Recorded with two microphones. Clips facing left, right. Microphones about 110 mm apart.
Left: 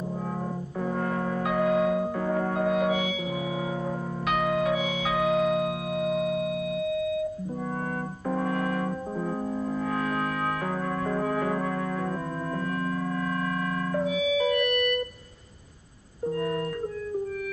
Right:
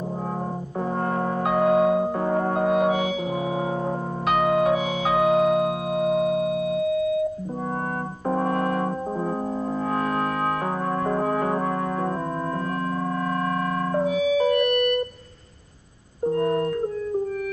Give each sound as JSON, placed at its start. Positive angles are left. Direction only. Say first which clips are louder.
{"t": 1.0, "sound": "music", "louder": "right 5 dB", "side_deg": -35}
{"t": 4.3, "sound": "music", "louder": "right 5 dB", "side_deg": -40}
{"t": 8.3, "sound": "music", "louder": "right 5 dB", "side_deg": -40}
{"t": 9.8, "sound": "music", "louder": "right 6 dB", "side_deg": -40}
{"t": 13.4, "sound": "a sound", "louder": "right 4 dB", "side_deg": -40}
{"t": 16.3, "sound": "music", "louder": "right 6 dB", "side_deg": -40}